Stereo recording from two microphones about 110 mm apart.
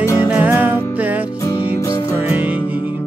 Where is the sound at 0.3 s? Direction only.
15° right (ahead or behind).